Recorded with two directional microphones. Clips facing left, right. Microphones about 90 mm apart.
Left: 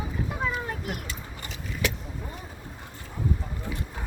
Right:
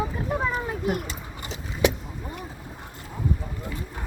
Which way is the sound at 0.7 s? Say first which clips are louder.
Right 7 dB; 10° right (ahead or behind).